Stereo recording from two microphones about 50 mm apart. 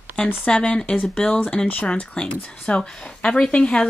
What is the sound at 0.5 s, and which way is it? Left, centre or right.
A woman's voice, centre.